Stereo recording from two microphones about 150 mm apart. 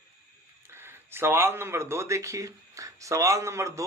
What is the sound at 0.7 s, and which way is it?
Speech, 15° right (ahead or behind).